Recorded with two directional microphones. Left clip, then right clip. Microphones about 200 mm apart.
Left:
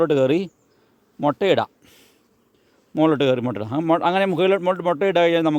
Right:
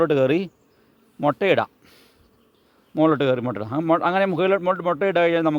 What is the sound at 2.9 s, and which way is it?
Speech, 35° left (ahead or behind).